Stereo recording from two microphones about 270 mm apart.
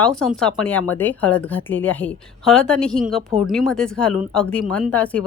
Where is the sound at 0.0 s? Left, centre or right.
Centre.